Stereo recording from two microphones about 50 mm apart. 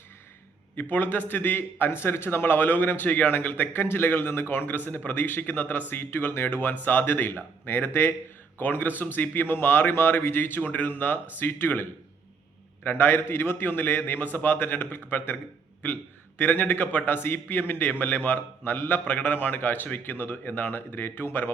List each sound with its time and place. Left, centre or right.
0.8 s a man's voice: left
3.7 s a man's voice: left
10.6 s a man's voice: left
16.4 s a man's voice: left
17.2 s a man's voice: left
20.7 s a man's voice: left